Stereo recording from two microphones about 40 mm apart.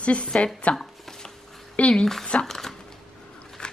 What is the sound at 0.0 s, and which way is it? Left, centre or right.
Speech, left.